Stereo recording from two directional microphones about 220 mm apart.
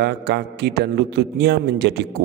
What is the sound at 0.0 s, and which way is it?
A man's voice, 50° right (ahead or behind).